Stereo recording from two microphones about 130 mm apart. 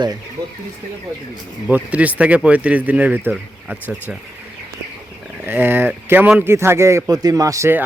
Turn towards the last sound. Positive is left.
turn(degrees=-20)  # may be behind; listen again after turning